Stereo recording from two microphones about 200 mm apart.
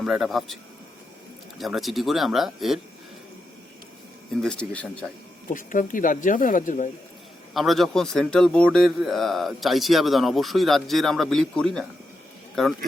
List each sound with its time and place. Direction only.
0.0 s a man's voice: centre (ahead or behind)
4.4 s a man's voice: 5° left (ahead or behind)
5.5 s speech: 40° left (ahead or behind)
7.5 s a man's voice: centre (ahead or behind)